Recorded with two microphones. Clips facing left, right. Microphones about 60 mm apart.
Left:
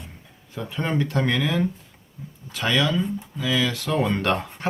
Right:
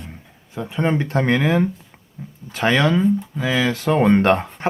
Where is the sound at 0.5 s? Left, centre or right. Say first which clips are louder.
Right 5 dB; centre; by 4.4 s right.